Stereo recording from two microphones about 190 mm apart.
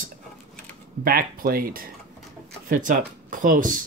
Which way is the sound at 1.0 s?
50° right (ahead or behind).